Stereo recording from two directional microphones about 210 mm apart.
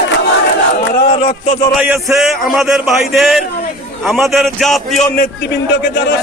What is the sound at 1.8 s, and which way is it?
A man's voice, 5° right (ahead or behind).